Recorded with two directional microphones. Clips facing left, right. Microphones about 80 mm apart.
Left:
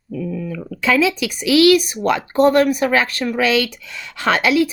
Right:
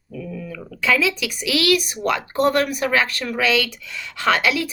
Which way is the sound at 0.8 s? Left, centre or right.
Left.